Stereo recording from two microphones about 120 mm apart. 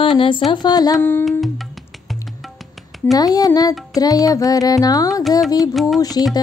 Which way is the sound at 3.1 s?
30° left (ahead or behind).